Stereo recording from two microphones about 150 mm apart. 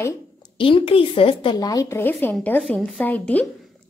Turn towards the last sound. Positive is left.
turn(degrees=10)  # may be behind; listen again after turning